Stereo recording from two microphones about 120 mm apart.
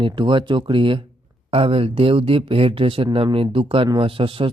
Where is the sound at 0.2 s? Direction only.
45° right (ahead or behind).